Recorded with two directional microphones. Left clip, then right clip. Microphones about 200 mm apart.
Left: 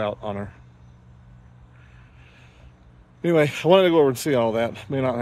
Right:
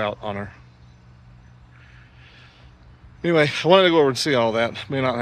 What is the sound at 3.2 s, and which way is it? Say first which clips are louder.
Speech: right 1 dB; 10° left (ahead or behind).